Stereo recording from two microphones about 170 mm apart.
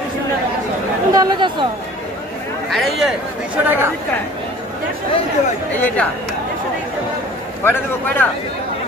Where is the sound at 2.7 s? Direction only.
Centre (ahead or behind).